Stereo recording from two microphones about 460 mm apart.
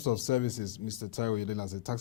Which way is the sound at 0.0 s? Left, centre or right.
Left.